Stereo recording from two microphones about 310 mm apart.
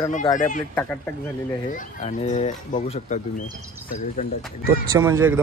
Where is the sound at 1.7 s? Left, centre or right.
Left.